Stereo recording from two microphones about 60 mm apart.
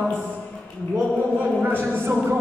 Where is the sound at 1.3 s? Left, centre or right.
Right.